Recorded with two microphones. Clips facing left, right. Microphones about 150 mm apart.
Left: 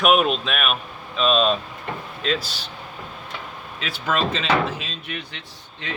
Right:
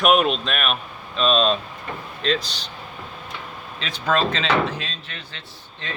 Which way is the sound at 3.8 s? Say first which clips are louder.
Right 2 dB; 5° left (ahead or behind).